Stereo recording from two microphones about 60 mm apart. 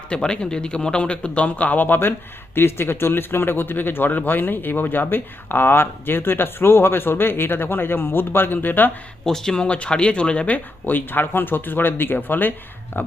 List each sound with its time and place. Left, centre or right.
0.1 s a man's voice: centre; by 8.9 s left
9.2 s speech: centre
9.6 s a man's voice: left